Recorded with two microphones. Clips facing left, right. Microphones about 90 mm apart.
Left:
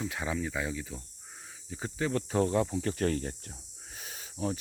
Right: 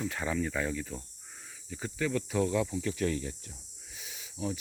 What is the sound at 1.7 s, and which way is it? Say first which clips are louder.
Speech: even; 25° left (ahead or behind).